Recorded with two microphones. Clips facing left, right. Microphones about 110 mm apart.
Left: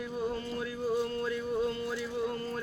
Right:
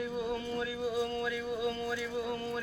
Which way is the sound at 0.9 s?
35° left (ahead or behind).